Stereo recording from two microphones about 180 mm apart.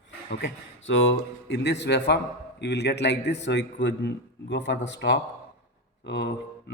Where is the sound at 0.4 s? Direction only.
90° left.